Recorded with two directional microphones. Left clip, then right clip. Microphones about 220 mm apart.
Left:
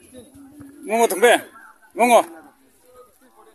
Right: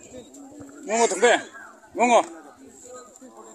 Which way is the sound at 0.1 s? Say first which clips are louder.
Right 1 dB; 30° left (ahead or behind).